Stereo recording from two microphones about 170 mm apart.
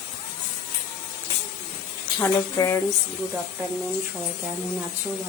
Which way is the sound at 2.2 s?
15° left (ahead or behind).